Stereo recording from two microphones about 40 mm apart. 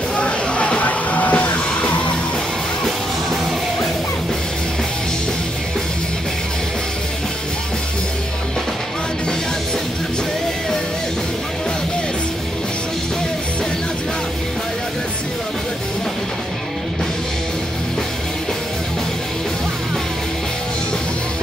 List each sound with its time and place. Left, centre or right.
0.1 s music: left